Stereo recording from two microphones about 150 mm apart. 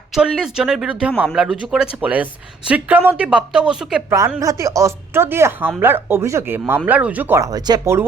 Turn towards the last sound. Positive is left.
turn(degrees=-25)  # may be behind; listen again after turning